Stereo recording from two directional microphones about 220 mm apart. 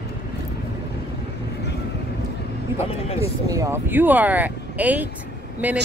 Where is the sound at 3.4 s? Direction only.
15° right (ahead or behind).